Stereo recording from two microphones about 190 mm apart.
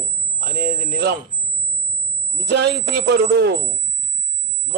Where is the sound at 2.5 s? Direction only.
65° right (ahead or behind).